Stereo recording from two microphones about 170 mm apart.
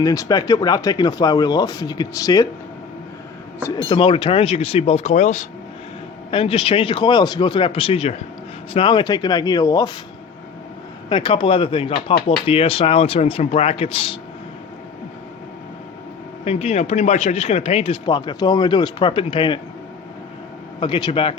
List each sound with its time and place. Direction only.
0.0 s speech: 20° left (ahead or behind)
3.8 s a man's voice: 30° left (ahead or behind)
6.3 s a man's voice: 35° left (ahead or behind)
11.1 s a man's voice: 30° left (ahead or behind)
16.4 s a man's voice: 40° left (ahead or behind)
20.7 s a man's voice: 30° left (ahead or behind)